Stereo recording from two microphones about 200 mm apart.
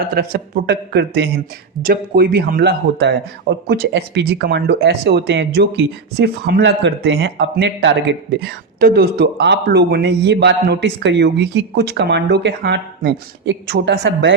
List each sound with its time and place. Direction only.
0.0 s a man's voice: 50° right (ahead or behind)